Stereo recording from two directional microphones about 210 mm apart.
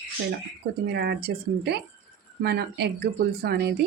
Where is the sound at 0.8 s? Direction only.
50° right (ahead or behind).